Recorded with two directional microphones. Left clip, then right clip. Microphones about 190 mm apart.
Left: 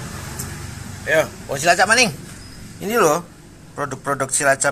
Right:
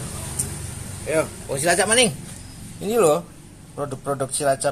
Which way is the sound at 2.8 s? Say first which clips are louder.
Left 1 dB; 15° left (ahead or behind).